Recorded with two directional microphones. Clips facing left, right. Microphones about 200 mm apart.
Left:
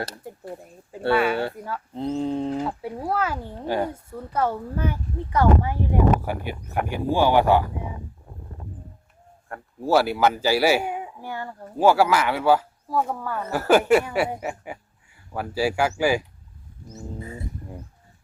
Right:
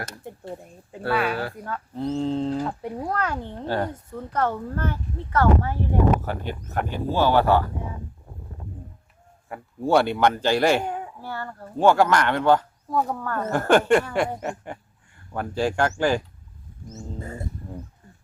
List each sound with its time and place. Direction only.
0.6 s speech: centre (ahead or behind)
1.9 s a child's voice: 15° left (ahead or behind)
2.8 s a child's voice: 5° left (ahead or behind)
9.5 s a child's voice: 5° left (ahead or behind)
17.2 s speech: 50° right (ahead or behind)